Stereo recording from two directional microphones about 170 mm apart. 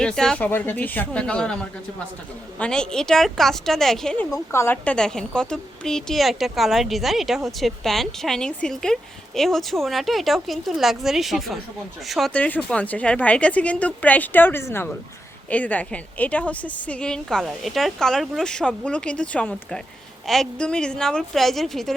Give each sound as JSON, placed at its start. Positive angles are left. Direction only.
{"t": 0.0, "sound": "a woman's voice", "side_deg": 5}
{"t": 2.6, "sound": "a woman's voice", "side_deg": 5}
{"t": 4.3, "sound": "a woman's voice", "side_deg": 15}